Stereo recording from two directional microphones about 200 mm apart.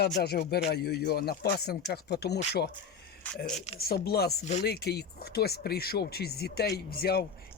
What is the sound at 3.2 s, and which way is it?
Speech, 5° left (ahead or behind).